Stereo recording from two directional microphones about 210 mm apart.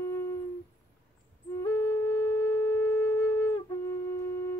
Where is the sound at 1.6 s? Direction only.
15° left (ahead or behind).